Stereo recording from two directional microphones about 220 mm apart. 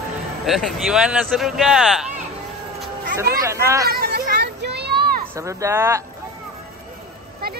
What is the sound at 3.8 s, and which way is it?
Children playing, 45° right (ahead or behind).